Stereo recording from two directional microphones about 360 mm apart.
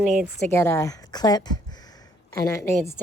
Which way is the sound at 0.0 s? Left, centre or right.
Centre.